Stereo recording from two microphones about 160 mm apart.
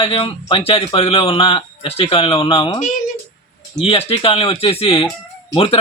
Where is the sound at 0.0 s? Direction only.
40° left (ahead or behind).